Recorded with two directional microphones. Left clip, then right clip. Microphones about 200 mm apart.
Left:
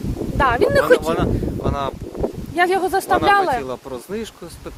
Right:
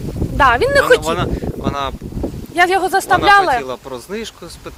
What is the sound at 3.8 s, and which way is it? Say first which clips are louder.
Speech: right 2 dB; 20° left (ahead or behind).